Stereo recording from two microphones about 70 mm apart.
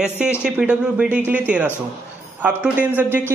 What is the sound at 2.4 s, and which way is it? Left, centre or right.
Speech, right.